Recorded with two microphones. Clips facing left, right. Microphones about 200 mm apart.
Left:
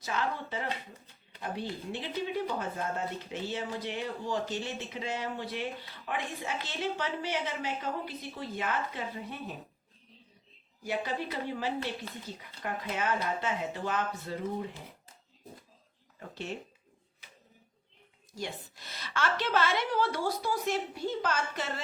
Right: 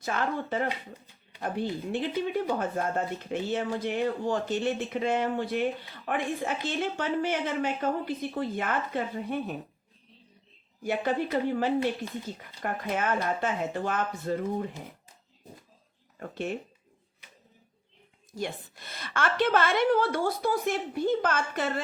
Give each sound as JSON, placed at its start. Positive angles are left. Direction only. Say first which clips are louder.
{"t": 0.0, "sound": "a woman's voice", "louder": "right 4 dB", "side_deg": -50}
{"t": 1.9, "sound": "a woman's voice", "louder": "right 5 dB", "side_deg": -50}
{"t": 10.8, "sound": "a woman's voice", "louder": "right 6 dB", "side_deg": -55}
{"t": 16.3, "sound": "a woman's voice", "louder": "right 6 dB", "side_deg": -55}
{"t": 18.3, "sound": "a woman's voice", "louder": "right 5 dB", "side_deg": -55}